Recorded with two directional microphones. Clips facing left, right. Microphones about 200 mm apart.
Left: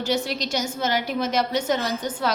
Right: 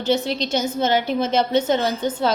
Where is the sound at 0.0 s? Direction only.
25° right (ahead or behind).